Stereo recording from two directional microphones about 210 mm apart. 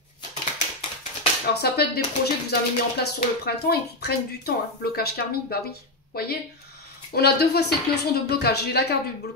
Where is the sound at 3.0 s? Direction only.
50° left (ahead or behind).